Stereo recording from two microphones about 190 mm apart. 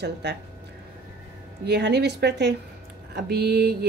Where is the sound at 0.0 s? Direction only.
60° right (ahead or behind).